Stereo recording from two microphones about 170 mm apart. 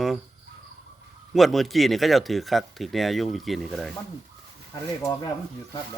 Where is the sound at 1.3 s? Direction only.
Centre (ahead or behind).